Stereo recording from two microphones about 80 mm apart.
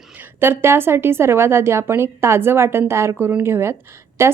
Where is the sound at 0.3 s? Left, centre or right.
Right.